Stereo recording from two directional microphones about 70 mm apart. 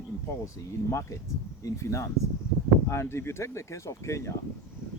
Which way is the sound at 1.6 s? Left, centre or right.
Left.